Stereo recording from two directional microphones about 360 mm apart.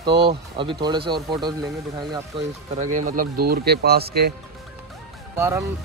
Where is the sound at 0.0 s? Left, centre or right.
Centre.